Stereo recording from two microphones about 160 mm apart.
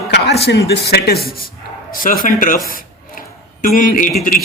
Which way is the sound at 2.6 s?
60° left (ahead or behind).